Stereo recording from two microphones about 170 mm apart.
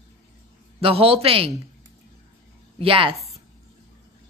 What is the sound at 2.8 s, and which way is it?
Speech, 30° right (ahead or behind).